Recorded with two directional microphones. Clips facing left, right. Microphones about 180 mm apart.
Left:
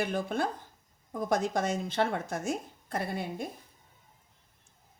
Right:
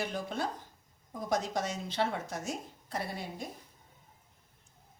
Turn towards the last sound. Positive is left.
turn(degrees=55)  # may be behind; listen again after turning